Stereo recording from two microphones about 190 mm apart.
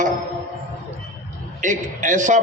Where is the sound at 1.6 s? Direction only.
40° right (ahead or behind).